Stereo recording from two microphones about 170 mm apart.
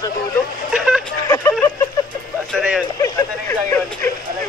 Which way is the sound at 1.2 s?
15° left (ahead or behind).